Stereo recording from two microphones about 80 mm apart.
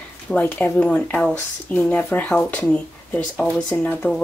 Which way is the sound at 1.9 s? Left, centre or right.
Centre.